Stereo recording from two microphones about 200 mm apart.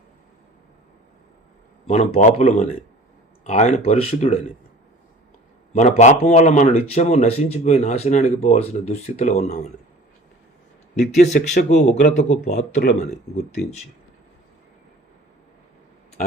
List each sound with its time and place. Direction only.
1.9 s speech: 35° left (ahead or behind)
5.7 s speech: 35° left (ahead or behind)
10.9 s speech: 35° left (ahead or behind)